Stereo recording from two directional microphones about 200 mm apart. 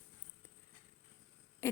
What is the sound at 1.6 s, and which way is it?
Owl, 15° left (ahead or behind).